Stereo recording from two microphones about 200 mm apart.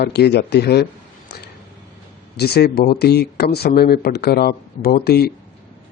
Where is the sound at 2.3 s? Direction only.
55° left (ahead or behind).